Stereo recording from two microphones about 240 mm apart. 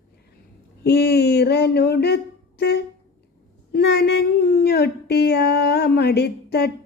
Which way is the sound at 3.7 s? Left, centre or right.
Left.